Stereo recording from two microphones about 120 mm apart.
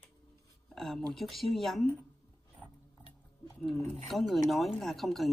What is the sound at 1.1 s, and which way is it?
Speech, centre (ahead or behind).